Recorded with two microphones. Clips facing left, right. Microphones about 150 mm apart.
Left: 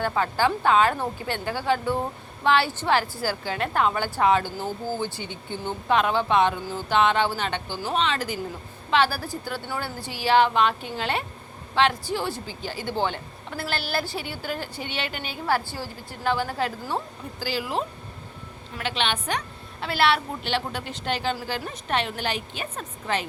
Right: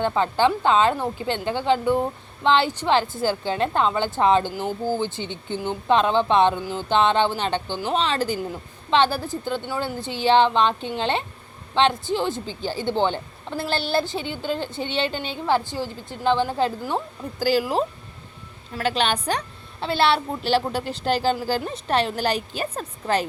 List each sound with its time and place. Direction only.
0.0 s a woman's voice: 20° right (ahead or behind)
17.4 s a woman's voice: 45° right (ahead or behind)